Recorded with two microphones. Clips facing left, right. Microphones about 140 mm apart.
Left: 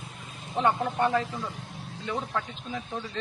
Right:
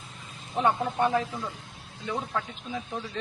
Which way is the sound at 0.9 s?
15° right (ahead or behind).